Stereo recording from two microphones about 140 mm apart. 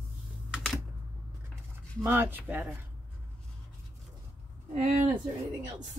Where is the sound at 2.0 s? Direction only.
15° right (ahead or behind).